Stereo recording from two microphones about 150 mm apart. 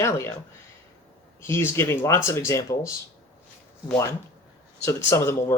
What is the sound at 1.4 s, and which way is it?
Speech, 15° left (ahead or behind).